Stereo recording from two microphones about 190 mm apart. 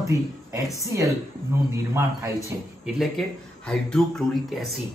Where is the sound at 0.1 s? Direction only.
15° right (ahead or behind).